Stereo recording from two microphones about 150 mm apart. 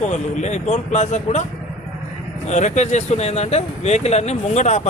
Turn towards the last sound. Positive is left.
turn(degrees=50)  # may be behind; listen again after turning